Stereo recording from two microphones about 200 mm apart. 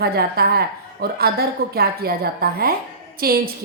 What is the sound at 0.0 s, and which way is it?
A woman's voice, 50° right (ahead or behind).